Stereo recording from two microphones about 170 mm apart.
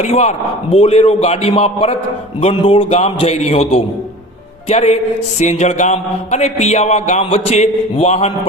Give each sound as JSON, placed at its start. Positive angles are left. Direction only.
{"t": 0.0, "sound": "a man's voice", "side_deg": 40}